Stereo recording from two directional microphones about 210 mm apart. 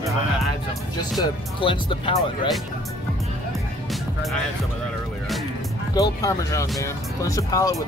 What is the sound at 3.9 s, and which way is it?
Music, centre (ahead or behind).